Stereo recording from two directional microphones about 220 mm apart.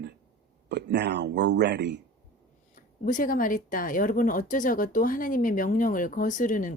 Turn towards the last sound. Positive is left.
turn(degrees=35)  # may be behind; listen again after turning